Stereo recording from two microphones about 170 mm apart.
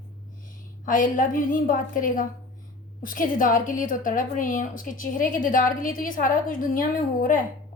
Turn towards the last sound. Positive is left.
turn(degrees=55)  # may be behind; listen again after turning